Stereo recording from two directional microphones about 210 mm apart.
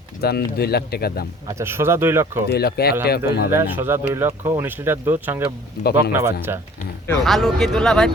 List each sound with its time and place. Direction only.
0.2 s speech: 50° left (ahead or behind)
1.5 s speech: 15° right (ahead or behind)
2.5 s speech: 50° left (ahead or behind)
3.5 s speech: 10° right (ahead or behind)
7.3 s speech: centre (ahead or behind)